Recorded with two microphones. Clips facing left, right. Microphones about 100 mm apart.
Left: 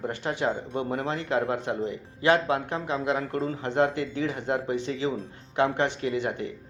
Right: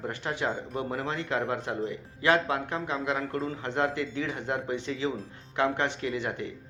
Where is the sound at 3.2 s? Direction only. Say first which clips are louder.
Left 2 dB; 40° left (ahead or behind).